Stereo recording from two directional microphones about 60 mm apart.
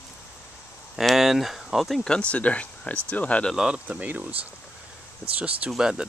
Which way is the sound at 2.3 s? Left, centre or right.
Left.